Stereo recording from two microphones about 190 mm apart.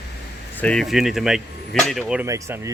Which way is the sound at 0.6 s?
5° left (ahead or behind).